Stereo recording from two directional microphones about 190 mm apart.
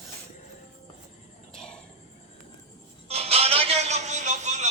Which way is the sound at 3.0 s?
30° right (ahead or behind).